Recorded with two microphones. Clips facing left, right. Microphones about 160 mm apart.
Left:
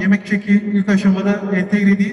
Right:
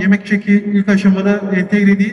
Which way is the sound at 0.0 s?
90° right.